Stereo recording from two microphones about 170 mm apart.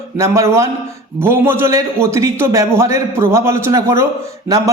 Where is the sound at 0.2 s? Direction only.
15° right (ahead or behind).